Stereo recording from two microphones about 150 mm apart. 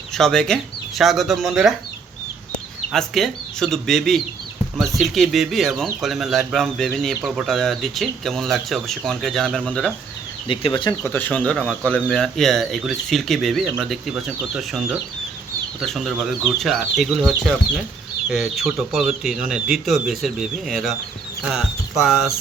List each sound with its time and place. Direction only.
0.1 s speech: 5° left (ahead or behind)
2.9 s speech: centre (ahead or behind)
10.5 s speech: 35° left (ahead or behind)
11.0 s speech: 15° left (ahead or behind); by 22.4 s 5° right (ahead or behind)